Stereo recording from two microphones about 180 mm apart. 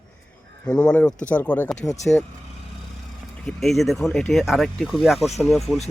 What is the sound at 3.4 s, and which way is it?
Speech, centre (ahead or behind).